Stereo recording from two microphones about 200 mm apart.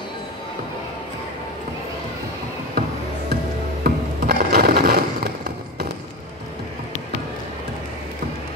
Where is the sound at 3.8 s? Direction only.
55° right (ahead or behind).